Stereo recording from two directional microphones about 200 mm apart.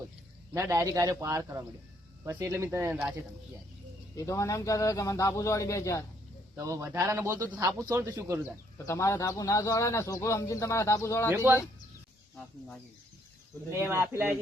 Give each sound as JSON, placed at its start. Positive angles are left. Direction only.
{"t": 0.5, "sound": "speech", "side_deg": -15}
{"t": 4.1, "sound": "speech", "side_deg": 15}
{"t": 6.6, "sound": "speech", "side_deg": -15}
{"t": 8.9, "sound": "speech", "side_deg": 15}
{"t": 11.3, "sound": "speech", "side_deg": -10}
{"t": 13.7, "sound": "speech", "side_deg": -10}